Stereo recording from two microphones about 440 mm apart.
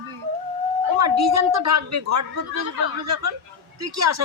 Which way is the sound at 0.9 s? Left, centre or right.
Right.